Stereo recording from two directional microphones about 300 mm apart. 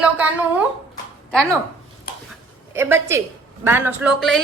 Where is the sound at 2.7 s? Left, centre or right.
Centre.